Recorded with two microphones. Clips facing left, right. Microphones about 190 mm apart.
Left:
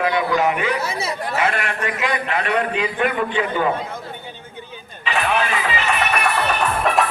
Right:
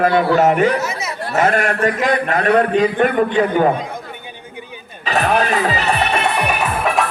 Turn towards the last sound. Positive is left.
turn(degrees=0)  # may be behind; listen again after turning